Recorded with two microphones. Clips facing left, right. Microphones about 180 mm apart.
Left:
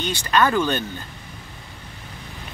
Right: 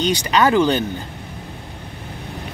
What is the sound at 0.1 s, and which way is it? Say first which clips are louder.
Speech: right 2 dB; 15° right (ahead or behind).